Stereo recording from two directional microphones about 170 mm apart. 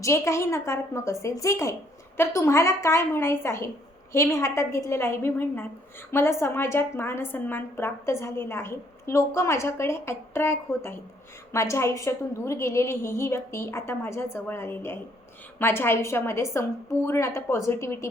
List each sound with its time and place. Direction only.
0.0 s a woman's voice: 15° left (ahead or behind)